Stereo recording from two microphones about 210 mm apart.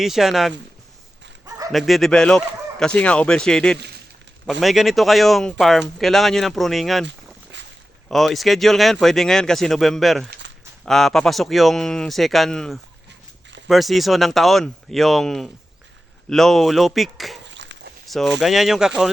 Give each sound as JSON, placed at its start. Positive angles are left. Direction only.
{"t": 0.0, "sound": "speech", "side_deg": 0}
{"t": 1.5, "sound": "dog", "side_deg": -15}
{"t": 1.7, "sound": "speech", "side_deg": 0}
{"t": 7.5, "sound": "boat", "side_deg": -55}
{"t": 8.1, "sound": "speech", "side_deg": 0}
{"t": 10.4, "sound": "a sound", "side_deg": -60}
{"t": 10.8, "sound": "speech", "side_deg": 0}
{"t": 17.4, "sound": "dog", "side_deg": -60}
{"t": 18.0, "sound": "speech", "side_deg": 0}